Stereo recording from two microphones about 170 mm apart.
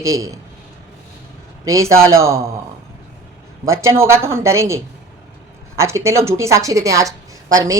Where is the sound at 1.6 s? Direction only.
20° right (ahead or behind).